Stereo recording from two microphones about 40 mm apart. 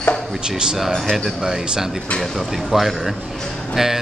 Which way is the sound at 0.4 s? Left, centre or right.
Right.